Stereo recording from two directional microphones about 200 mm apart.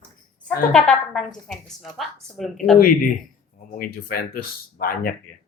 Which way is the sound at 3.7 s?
45° left (ahead or behind).